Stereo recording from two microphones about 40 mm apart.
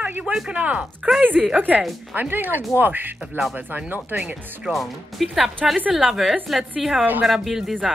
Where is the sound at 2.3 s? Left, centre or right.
Right.